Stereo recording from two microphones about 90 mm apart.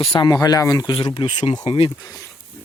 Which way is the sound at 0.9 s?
75° left (ahead or behind).